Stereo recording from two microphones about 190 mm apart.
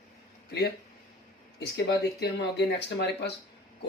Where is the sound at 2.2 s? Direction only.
65° left (ahead or behind).